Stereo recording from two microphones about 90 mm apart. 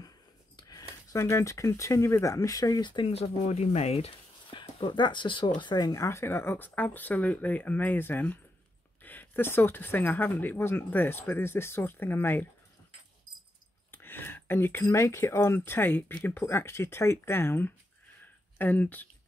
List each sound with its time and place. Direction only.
0.6 s a sound: 45° left (ahead or behind)
1.2 s speech: 35° left (ahead or behind)
2.8 s speech: 60° left (ahead or behind)
4.5 s speech: 70° left (ahead or behind)
5.6 s speech: 50° left (ahead or behind)
6.0 s speech: 30° left (ahead or behind)
13.9 s speech: 25° left (ahead or behind)